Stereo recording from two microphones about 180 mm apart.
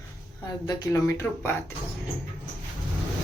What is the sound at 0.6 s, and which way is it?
Speech, 20° left (ahead or behind).